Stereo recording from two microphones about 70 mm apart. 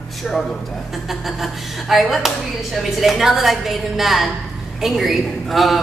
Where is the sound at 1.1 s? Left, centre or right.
Centre.